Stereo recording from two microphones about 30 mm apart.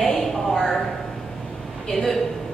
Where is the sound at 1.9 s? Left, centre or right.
Centre.